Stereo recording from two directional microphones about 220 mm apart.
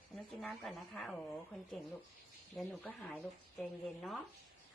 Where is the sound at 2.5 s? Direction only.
5° left (ahead or behind).